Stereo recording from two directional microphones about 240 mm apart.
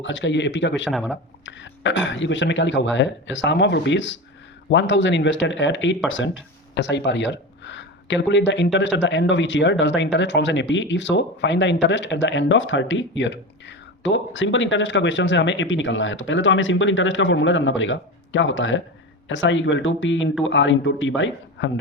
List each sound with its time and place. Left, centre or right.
0.0 s speech: left
0.9 s speech: centre
1.5 s speech: left